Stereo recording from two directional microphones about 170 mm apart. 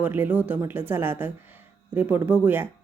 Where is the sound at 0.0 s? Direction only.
10° right (ahead or behind).